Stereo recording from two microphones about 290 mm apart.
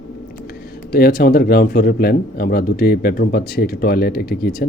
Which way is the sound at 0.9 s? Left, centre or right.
Left.